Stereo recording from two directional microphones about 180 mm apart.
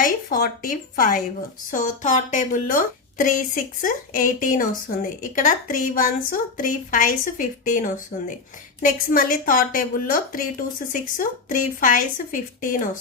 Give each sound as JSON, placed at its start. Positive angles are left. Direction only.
{"t": 0.0, "sound": "speech", "side_deg": 55}